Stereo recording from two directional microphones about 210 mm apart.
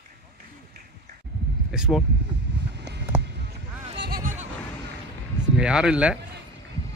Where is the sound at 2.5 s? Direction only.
55° right (ahead or behind).